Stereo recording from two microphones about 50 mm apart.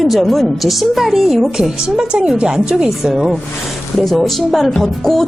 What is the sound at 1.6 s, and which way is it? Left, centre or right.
Speech, centre.